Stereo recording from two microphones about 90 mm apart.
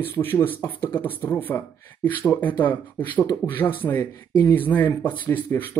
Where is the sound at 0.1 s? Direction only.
20° left (ahead or behind).